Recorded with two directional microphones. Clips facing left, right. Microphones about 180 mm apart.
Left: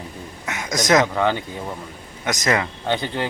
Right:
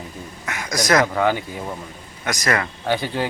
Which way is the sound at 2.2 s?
20° left (ahead or behind).